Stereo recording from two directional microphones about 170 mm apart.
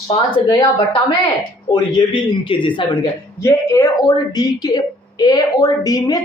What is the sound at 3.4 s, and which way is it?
A woman's voice, 20° left (ahead or behind).